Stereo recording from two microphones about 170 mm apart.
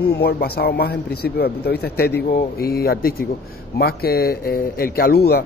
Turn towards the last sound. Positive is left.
turn(degrees=65)  # may be behind; listen again after turning